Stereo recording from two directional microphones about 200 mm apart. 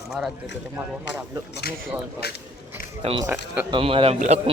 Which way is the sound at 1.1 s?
65° left (ahead or behind).